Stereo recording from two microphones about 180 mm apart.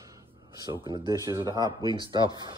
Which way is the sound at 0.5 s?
20° right (ahead or behind).